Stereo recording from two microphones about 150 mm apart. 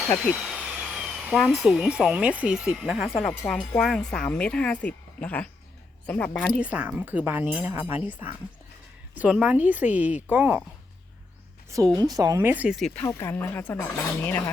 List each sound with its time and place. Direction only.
0.3 s a sound: 5° right (ahead or behind)
1.4 s speech: centre (ahead or behind)
6.6 s speech: 10° right (ahead or behind)
11.9 s speech: 25° right (ahead or behind)
12.5 s speech: 10° right (ahead or behind)
13.1 s speech: 15° left (ahead or behind)